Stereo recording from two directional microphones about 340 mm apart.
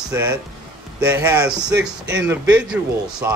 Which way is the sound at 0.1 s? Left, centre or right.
Centre.